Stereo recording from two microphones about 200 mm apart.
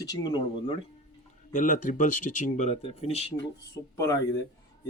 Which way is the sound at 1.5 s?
40° left (ahead or behind).